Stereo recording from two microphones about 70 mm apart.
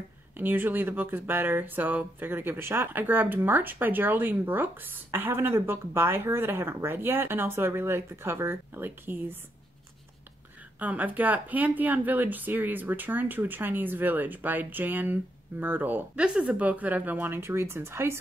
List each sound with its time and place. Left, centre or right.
0.4 s speech: right
10.8 s speech: right